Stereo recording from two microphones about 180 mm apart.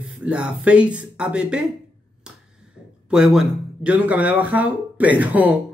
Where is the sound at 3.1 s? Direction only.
5° right (ahead or behind).